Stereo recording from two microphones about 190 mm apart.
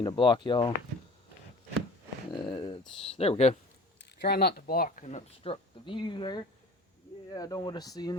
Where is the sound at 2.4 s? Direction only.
25° left (ahead or behind).